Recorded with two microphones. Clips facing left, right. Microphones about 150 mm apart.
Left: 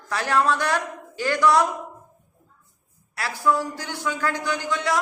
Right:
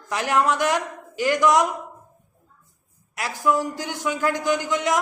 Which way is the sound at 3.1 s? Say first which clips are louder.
Right 1 dB; 15° right (ahead or behind).